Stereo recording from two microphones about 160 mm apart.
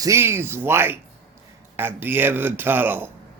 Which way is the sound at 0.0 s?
15° right (ahead or behind).